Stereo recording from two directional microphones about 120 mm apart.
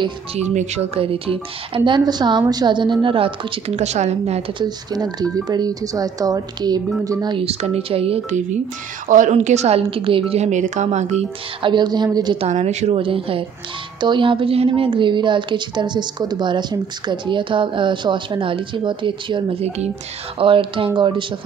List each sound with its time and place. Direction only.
0.4 s a woman's voice: 65° right (ahead or behind); by 3.7 s 50° right (ahead or behind)
3.7 s speech: 70° right (ahead or behind)
4.6 s a woman's voice: 35° right (ahead or behind)
7.3 s a woman's voice: 55° right (ahead or behind)
9.1 s speech: 90° right; by 10.2 s 50° right (ahead or behind)
10.3 s speech: 75° right (ahead or behind)
11.6 s a woman's voice: 40° right (ahead or behind)
12.4 s a woman's voice: 70° right (ahead or behind); by 21.3 s 45° right (ahead or behind)